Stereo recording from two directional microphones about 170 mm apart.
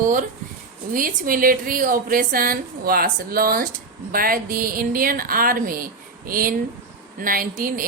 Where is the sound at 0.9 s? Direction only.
55° right (ahead or behind).